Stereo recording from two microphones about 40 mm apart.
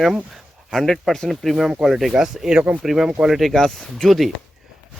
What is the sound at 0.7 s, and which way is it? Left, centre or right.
Speech, centre.